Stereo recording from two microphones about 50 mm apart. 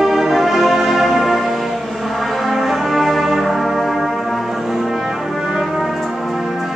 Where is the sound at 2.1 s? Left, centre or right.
Centre.